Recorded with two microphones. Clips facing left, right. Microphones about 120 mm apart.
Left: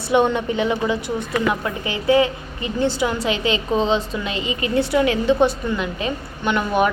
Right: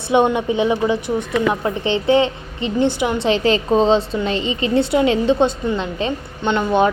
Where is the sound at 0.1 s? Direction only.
15° right (ahead or behind).